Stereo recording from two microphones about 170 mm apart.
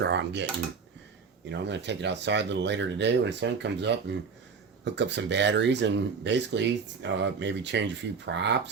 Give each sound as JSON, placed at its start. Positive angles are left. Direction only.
{"t": 0.0, "sound": "speech", "side_deg": -90}
{"t": 1.5, "sound": "speech", "side_deg": -90}